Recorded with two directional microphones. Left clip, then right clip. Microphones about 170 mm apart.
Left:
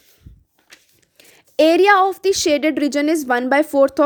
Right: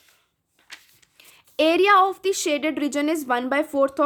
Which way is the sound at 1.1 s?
30° left (ahead or behind).